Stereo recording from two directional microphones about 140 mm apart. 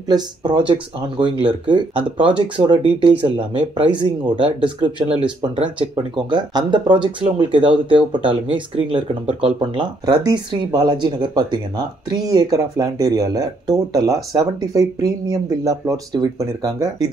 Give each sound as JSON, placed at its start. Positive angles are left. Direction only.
{"t": 0.1, "sound": "speech", "side_deg": -30}
{"t": 5.2, "sound": "speech", "side_deg": -10}
{"t": 6.3, "sound": "speech", "side_deg": -35}